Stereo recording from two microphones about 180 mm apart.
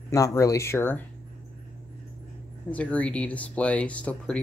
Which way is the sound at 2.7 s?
10° left (ahead or behind).